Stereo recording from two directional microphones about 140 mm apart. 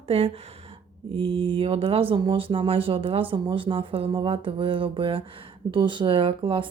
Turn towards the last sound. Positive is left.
turn(degrees=-35)  # may be behind; listen again after turning